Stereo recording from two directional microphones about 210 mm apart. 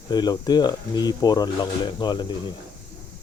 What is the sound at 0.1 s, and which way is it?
Speech, 20° left (ahead or behind).